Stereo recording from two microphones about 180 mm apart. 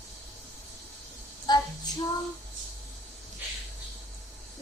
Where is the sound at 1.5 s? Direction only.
25° left (ahead or behind).